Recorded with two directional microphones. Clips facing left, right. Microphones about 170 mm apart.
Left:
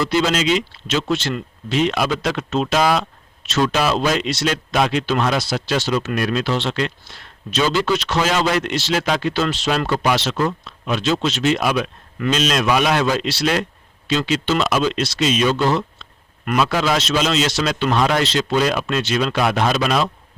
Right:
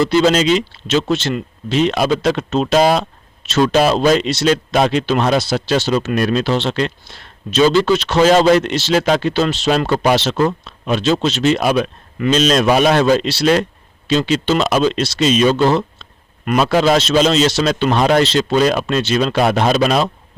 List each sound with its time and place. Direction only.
0.1 s speech: 35° right (ahead or behind)